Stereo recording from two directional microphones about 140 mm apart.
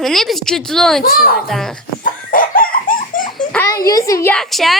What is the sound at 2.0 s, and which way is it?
Chicken, 85° left.